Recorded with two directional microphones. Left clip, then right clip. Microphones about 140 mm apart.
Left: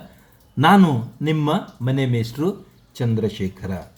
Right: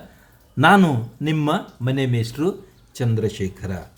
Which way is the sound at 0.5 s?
20° right (ahead or behind).